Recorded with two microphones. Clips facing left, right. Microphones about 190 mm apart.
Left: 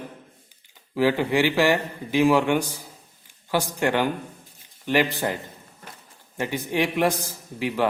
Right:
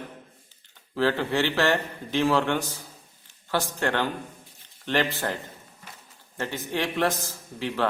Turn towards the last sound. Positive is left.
turn(degrees=10)  # may be behind; listen again after turning